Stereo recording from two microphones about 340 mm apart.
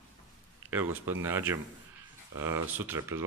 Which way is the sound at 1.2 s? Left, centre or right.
Centre.